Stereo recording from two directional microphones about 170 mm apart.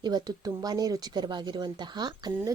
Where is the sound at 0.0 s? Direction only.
25° right (ahead or behind).